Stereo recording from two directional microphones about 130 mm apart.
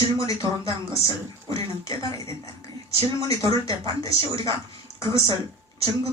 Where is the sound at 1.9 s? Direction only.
25° left (ahead or behind).